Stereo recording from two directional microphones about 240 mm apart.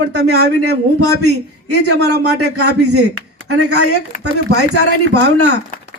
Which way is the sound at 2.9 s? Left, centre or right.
Right.